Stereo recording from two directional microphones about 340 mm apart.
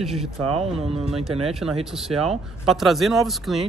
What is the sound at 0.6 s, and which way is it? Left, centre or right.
Speech, centre.